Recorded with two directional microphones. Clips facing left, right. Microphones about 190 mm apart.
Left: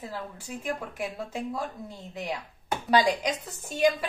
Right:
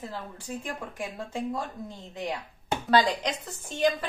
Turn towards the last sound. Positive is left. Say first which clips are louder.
# left 2 dB
turn(degrees=10)  # may be behind; listen again after turning